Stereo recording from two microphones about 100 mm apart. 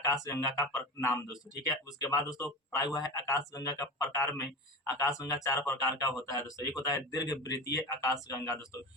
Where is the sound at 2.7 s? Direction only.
40° left (ahead or behind).